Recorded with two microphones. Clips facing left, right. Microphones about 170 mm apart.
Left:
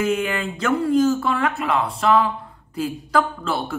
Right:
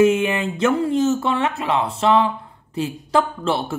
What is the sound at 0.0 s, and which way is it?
Speech, 25° right (ahead or behind).